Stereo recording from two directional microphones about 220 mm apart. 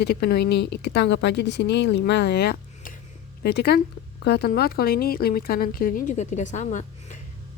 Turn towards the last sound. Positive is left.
turn(degrees=35)  # may be behind; listen again after turning